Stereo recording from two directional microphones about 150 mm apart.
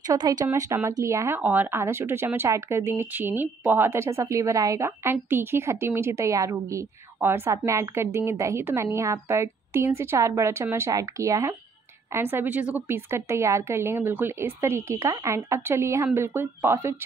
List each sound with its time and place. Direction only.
0.0 s speech: 25° right (ahead or behind)